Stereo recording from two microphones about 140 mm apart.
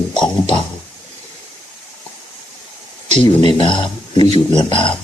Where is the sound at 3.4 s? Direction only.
35° left (ahead or behind).